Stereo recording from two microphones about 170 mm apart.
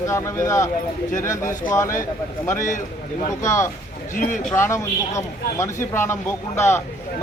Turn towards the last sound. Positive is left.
turn(degrees=15)  # may be behind; listen again after turning